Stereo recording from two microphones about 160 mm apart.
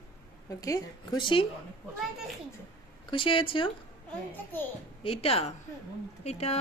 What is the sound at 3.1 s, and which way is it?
Speech, 35° left (ahead or behind).